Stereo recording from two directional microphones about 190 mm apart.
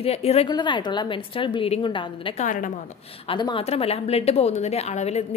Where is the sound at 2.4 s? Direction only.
45° left (ahead or behind).